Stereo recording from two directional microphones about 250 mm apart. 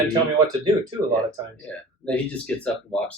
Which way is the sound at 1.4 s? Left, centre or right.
Centre.